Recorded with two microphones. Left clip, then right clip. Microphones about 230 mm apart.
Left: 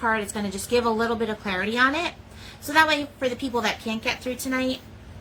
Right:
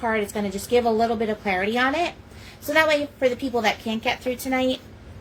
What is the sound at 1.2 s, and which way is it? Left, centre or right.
Speech, left.